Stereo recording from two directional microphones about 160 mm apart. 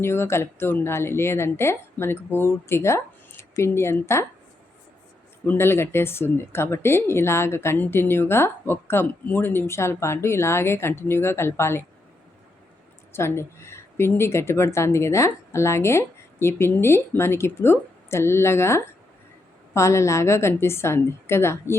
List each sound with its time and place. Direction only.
0.0 s speech: 15° left (ahead or behind)
5.5 s speech: 15° left (ahead or behind)
13.1 s speech: 15° left (ahead or behind)